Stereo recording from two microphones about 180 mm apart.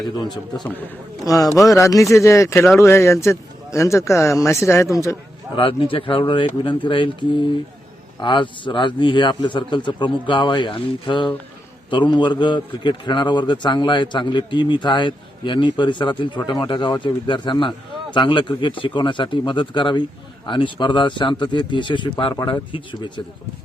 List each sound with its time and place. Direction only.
0.7 s a man's voice: 15° left (ahead or behind)
5.5 s a man's voice: 30° left (ahead or behind)